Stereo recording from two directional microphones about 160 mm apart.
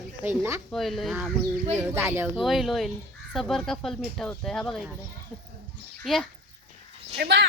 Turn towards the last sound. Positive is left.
turn(degrees=-85)